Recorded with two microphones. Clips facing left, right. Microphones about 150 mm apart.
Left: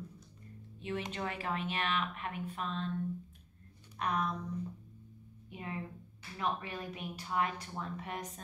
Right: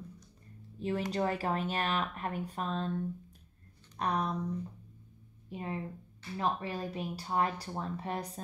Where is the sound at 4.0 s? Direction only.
35° right (ahead or behind).